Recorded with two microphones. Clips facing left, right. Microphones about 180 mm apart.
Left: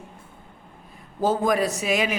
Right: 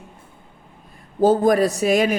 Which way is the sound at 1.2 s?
35° right (ahead or behind).